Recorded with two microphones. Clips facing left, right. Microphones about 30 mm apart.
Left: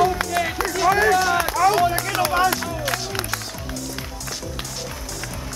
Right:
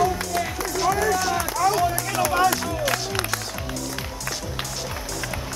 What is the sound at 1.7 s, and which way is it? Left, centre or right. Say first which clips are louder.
Music: left 3 dB; left.